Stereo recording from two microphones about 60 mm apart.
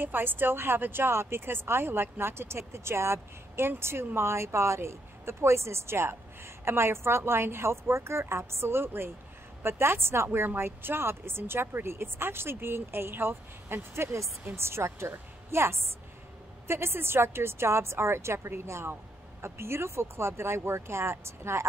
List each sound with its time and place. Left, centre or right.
0.0 s a woman's voice: right